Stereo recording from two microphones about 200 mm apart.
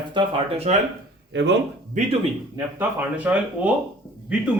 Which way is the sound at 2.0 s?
35° right (ahead or behind).